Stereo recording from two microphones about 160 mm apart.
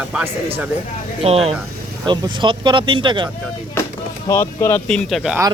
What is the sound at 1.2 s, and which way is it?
Speech, 40° right (ahead or behind).